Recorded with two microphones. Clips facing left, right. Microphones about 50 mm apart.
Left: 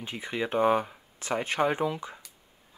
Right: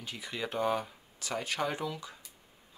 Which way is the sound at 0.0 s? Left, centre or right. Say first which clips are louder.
Left 6 dB; left.